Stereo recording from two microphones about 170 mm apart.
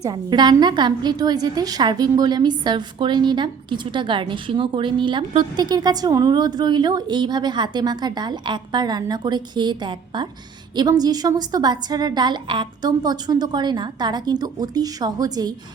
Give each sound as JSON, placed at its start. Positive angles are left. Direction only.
{"t": 0.0, "sound": "a woman's voice", "side_deg": -25}